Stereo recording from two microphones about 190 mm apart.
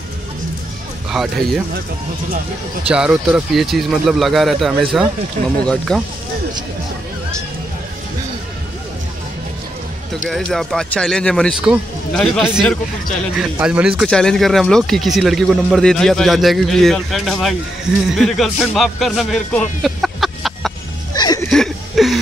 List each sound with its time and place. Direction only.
1.1 s speech: centre (ahead or behind)
2.9 s speech: 5° right (ahead or behind)
10.3 s speech: centre (ahead or behind)
19.8 s a sound: centre (ahead or behind)
21.1 s a sound: 20° left (ahead or behind)
21.5 s chuckle: centre (ahead or behind)